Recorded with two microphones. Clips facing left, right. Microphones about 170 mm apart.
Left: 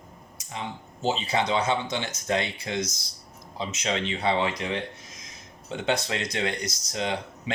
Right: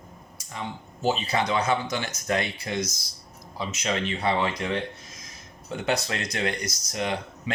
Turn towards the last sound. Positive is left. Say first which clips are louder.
# even
turn(degrees=25)  # may be behind; listen again after turning